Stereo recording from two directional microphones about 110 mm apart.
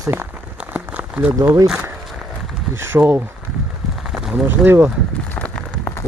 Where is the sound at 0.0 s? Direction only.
20° right (ahead or behind).